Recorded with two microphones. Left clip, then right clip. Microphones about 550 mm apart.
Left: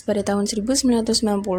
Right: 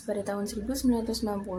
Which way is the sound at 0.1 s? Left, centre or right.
Right.